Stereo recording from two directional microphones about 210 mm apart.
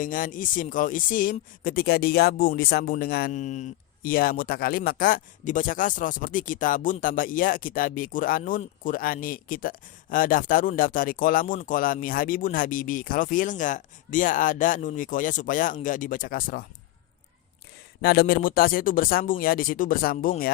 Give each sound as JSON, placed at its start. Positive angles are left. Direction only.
{"t": 0.0, "sound": "speech", "side_deg": 40}
{"t": 18.0, "sound": "speech", "side_deg": 45}